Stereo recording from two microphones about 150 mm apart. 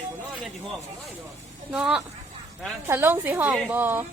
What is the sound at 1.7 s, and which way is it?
A woman's voice, 5° right (ahead or behind).